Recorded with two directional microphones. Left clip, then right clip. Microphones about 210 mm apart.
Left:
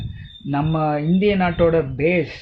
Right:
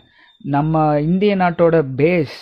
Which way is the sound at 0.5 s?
50° right (ahead or behind).